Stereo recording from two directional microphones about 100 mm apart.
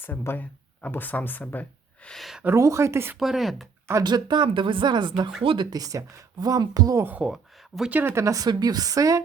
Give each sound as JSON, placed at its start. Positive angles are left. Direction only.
{"t": 0.0, "sound": "speech", "side_deg": 20}
{"t": 2.0, "sound": "speech", "side_deg": 0}
{"t": 2.4, "sound": "speech", "side_deg": -25}
{"t": 3.2, "sound": "speech", "side_deg": 0}
{"t": 4.0, "sound": "speech", "side_deg": -45}
{"t": 5.4, "sound": "speech", "side_deg": -60}
{"t": 5.7, "sound": "speech", "side_deg": -35}
{"t": 7.0, "sound": "speech", "side_deg": -10}